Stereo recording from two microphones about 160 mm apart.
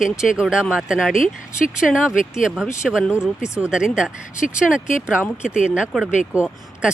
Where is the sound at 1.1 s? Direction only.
55° left (ahead or behind).